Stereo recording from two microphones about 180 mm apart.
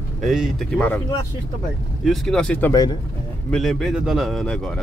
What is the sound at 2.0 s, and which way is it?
A man's voice, centre (ahead or behind).